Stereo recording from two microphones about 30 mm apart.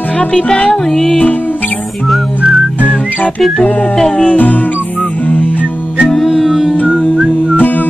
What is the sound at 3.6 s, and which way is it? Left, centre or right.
Music, left.